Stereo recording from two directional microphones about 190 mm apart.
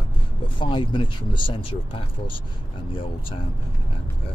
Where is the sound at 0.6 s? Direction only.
25° left (ahead or behind).